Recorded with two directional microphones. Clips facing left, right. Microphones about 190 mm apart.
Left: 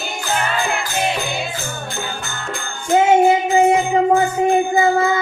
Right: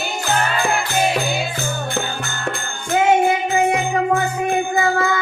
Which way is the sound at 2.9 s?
25° left (ahead or behind).